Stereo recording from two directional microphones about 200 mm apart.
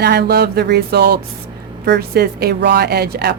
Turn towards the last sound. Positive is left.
turn(degrees=-50)  # may be behind; listen again after turning